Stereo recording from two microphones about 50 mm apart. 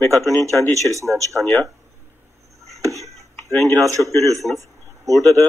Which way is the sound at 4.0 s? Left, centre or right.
Left.